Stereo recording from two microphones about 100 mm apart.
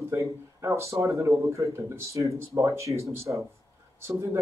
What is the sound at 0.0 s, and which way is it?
A man's voice, 30° right (ahead or behind).